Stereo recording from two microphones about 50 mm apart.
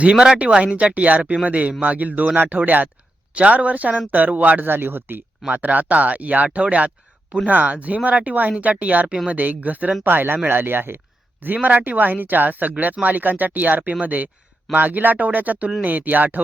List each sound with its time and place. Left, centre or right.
0.0 s a man's voice: centre; by 5.2 s right
5.5 s a man's voice: right